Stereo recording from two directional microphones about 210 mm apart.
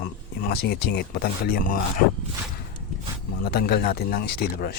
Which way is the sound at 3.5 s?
50° left (ahead or behind).